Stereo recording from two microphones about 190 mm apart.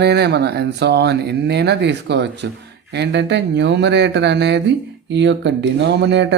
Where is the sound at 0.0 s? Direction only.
60° right (ahead or behind).